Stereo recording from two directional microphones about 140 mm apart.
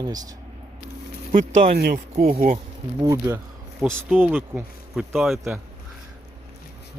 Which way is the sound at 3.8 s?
10° right (ahead or behind).